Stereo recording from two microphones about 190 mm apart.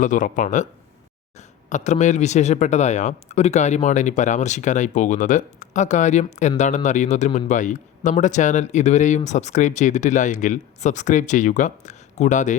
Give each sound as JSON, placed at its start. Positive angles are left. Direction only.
{"t": 0.0, "sound": "speech", "side_deg": 40}